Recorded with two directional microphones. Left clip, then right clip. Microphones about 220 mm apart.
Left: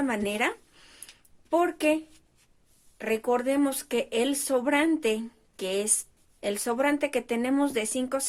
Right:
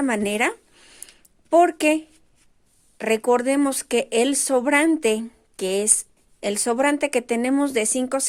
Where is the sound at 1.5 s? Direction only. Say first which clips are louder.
Right 8 dB; 35° right (ahead or behind).